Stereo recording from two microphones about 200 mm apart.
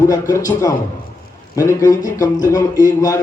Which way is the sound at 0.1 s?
15° left (ahead or behind).